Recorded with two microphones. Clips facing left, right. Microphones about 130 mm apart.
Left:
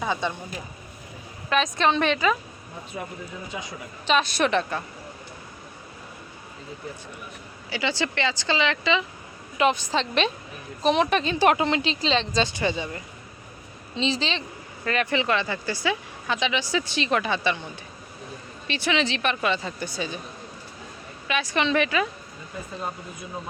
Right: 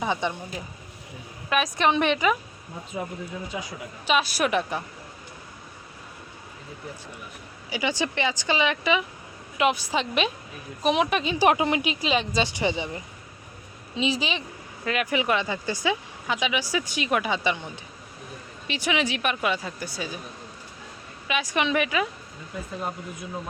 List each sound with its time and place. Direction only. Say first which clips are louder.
0.0 s speech: even; 15° right (ahead or behind)
1.5 s speech: left 1 dB; 10° right (ahead or behind)
7.7 s speech: even; 15° right (ahead or behind)
18.7 s speech: left 1 dB; 15° right (ahead or behind)
21.2 s speech: left 1 dB; 15° right (ahead or behind)